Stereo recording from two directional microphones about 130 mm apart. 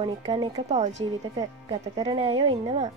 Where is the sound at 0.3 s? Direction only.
30° right (ahead or behind).